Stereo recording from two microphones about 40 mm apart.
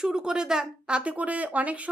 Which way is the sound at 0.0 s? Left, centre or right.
Centre.